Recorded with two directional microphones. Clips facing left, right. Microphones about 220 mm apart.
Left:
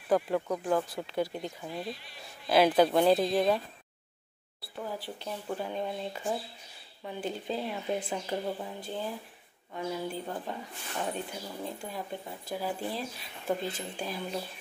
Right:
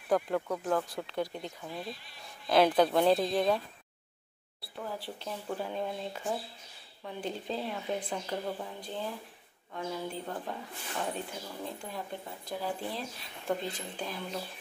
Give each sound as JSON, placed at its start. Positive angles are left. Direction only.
{"t": 0.1, "sound": "speech", "side_deg": 5}
{"t": 4.7, "sound": "a woman's voice", "side_deg": 0}